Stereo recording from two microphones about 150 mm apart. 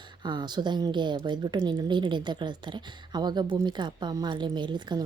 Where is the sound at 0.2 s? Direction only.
30° right (ahead or behind).